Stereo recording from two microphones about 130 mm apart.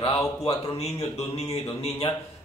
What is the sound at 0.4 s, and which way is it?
Speech, 55° left (ahead or behind).